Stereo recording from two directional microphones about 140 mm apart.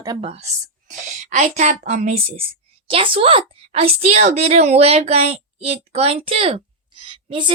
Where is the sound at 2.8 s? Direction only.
40° right (ahead or behind).